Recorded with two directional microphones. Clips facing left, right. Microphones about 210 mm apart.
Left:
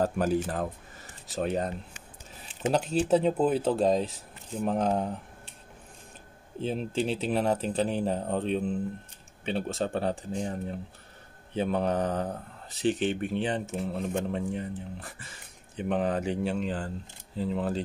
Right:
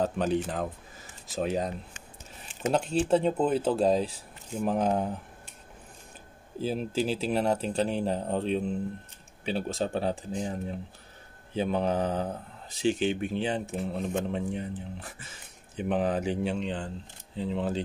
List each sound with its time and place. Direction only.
0.0 s speech: 5° left (ahead or behind)
6.6 s speech: 5° right (ahead or behind)